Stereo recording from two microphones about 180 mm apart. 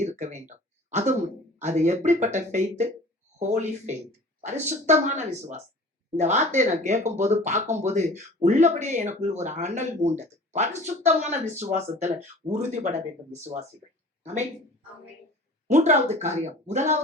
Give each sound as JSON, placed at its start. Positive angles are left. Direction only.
{"t": 0.0, "sound": "a sound", "side_deg": -40}
{"t": 1.5, "sound": "speech", "side_deg": -40}
{"t": 15.6, "sound": "speech", "side_deg": -40}